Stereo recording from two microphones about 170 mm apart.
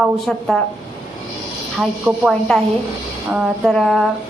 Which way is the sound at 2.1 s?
15° right (ahead or behind).